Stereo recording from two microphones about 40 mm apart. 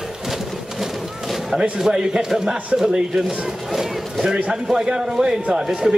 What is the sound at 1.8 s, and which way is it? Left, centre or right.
A man's voice, centre.